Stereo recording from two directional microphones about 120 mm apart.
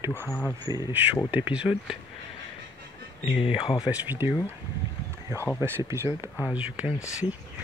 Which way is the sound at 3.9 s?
15° right (ahead or behind).